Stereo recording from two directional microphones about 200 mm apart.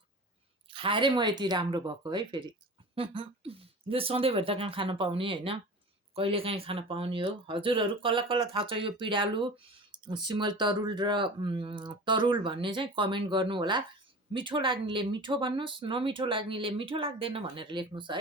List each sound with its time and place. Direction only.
0.7 s speech: 25° right (ahead or behind)